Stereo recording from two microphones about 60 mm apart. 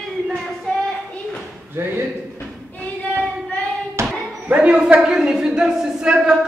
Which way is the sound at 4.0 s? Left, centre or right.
Right.